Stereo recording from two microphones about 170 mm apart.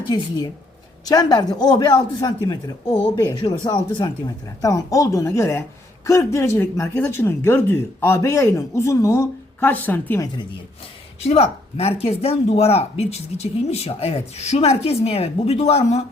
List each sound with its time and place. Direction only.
1.0 s a man's voice: 25° left (ahead or behind)
2.8 s a man's voice: 35° left (ahead or behind); by 10.2 s 10° left (ahead or behind)
11.2 s speech: 40° left (ahead or behind)